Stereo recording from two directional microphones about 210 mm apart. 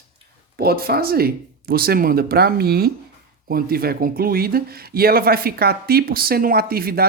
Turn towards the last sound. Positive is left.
turn(degrees=-45)  # may be behind; listen again after turning